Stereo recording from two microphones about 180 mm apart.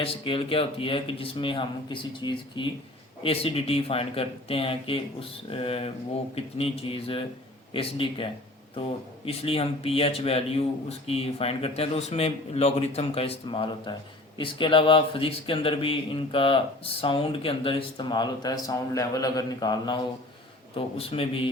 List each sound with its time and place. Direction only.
0.0 s a man's voice: 30° left (ahead or behind)